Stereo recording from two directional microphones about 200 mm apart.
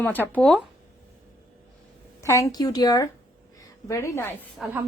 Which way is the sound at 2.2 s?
15° left (ahead or behind).